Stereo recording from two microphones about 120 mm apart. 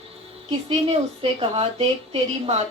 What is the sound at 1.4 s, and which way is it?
A woman's voice, 50° right (ahead or behind).